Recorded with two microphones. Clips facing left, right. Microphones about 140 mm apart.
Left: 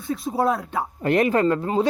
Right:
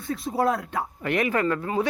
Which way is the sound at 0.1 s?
25° left (ahead or behind).